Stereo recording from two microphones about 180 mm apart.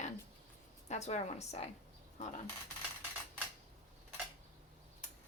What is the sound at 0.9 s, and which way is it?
Speech, 40° left (ahead or behind).